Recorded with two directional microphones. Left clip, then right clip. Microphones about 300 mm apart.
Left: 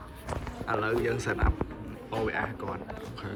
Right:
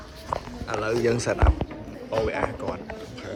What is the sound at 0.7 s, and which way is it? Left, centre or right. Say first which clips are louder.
Speech: right 4 dB; centre.